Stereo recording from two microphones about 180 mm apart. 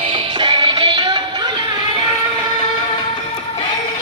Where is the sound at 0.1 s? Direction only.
30° right (ahead or behind).